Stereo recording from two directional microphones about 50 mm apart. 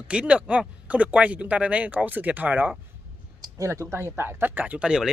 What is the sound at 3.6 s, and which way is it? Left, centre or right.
Speech, right.